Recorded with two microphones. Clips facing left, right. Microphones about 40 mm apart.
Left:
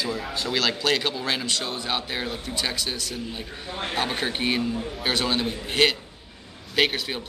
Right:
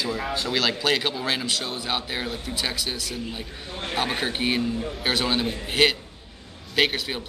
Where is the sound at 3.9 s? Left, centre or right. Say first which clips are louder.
Right 1 dB; centre.